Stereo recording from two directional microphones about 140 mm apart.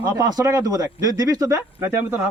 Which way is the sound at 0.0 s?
25° right (ahead or behind).